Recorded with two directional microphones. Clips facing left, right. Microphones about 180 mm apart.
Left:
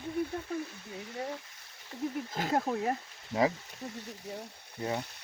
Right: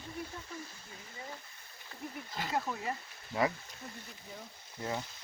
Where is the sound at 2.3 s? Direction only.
45° left (ahead or behind).